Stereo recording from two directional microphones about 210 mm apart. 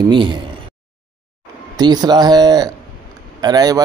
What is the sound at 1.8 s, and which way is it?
Speech, 20° right (ahead or behind).